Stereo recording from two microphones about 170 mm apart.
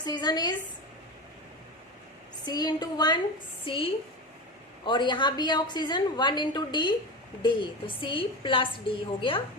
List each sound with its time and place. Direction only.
0.0 s a woman's voice: 25° left (ahead or behind)
2.4 s a woman's voice: 25° left (ahead or behind)